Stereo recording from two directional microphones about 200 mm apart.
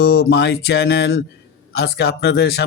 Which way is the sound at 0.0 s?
55° left (ahead or behind).